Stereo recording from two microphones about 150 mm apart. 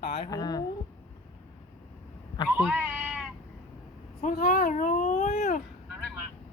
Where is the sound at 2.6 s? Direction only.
5° right (ahead or behind).